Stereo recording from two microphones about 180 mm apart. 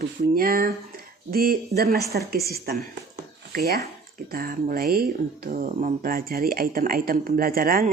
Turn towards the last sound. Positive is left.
turn(degrees=-55)  # may be behind; listen again after turning